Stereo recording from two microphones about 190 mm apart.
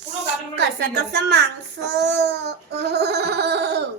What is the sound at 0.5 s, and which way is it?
A woman's voice, 65° right (ahead or behind).